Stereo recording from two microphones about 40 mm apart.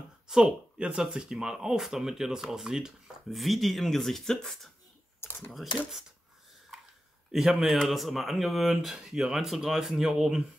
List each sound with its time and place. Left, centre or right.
0.3 s speech: centre
3.3 s speech: centre
5.5 s speech: centre
7.3 s speech: centre
8.9 s speech: centre